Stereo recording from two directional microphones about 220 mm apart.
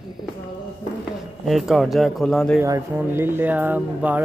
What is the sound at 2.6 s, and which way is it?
Speech, 10° right (ahead or behind).